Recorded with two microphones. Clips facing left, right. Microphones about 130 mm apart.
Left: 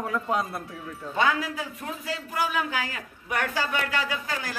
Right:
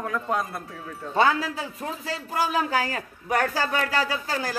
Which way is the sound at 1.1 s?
35° right (ahead or behind).